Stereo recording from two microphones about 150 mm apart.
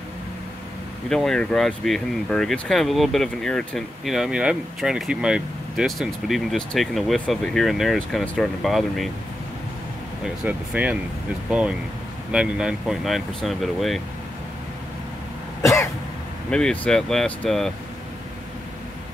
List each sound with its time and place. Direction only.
1.0 s speech: 5° left (ahead or behind)
10.2 s speech: 5° right (ahead or behind)
12.3 s speech: 5° right (ahead or behind)
15.6 s cough: 20° left (ahead or behind)
16.4 s speech: 5° left (ahead or behind)